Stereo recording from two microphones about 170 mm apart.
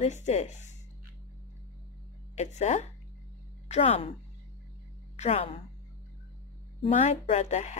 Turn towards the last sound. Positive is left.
turn(degrees=45)  # may be behind; listen again after turning